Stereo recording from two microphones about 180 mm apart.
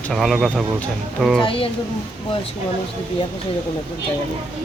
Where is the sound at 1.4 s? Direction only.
30° left (ahead or behind).